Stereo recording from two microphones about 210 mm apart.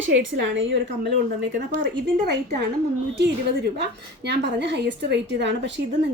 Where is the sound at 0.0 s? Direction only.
60° right (ahead or behind).